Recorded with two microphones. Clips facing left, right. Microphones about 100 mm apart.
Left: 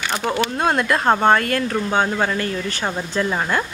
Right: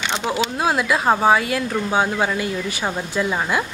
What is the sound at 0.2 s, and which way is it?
Speech, 20° right (ahead or behind).